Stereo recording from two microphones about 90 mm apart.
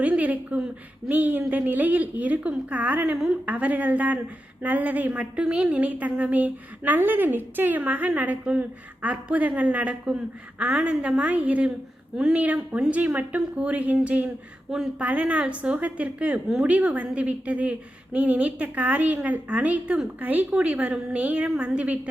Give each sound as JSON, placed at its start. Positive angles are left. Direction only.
{"t": 0.0, "sound": "a woman's voice", "side_deg": -15}
{"t": 16.7, "sound": "a woman's voice", "side_deg": -15}